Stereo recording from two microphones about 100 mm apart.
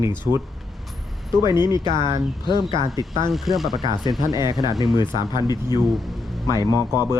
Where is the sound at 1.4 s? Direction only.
45° left (ahead or behind).